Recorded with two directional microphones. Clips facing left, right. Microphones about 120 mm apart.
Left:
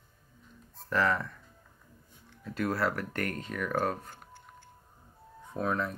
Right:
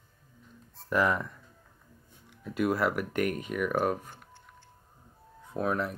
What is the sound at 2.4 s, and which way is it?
Speech, 15° right (ahead or behind).